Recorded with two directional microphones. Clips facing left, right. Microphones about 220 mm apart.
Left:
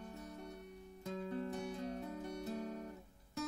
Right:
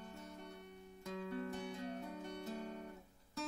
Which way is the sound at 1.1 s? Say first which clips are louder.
Left 2 dB; 30° left (ahead or behind).